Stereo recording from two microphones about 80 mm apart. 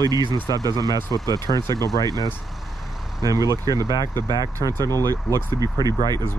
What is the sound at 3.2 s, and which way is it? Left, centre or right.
Speech, right.